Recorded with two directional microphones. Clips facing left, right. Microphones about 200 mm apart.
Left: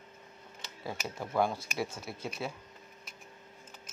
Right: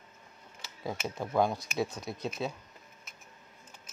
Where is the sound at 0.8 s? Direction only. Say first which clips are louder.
Right 3 dB; 15° right (ahead or behind).